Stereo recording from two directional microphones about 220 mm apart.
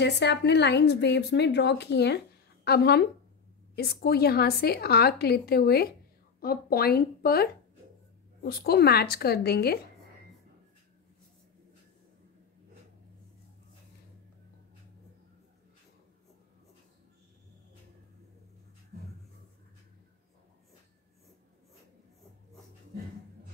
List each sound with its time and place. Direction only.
0.0 s a woman's voice: 50° left (ahead or behind)
8.5 s a woman's voice: 45° left (ahead or behind)